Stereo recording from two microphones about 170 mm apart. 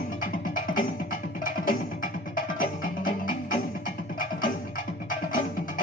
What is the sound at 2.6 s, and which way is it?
Music, 55° left (ahead or behind).